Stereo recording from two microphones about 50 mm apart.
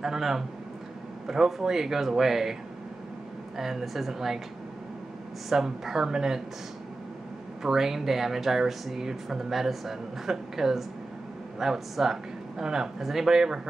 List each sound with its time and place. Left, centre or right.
0.0 s speech: centre
3.5 s speech: centre
5.5 s speech: centre
7.6 s speech: centre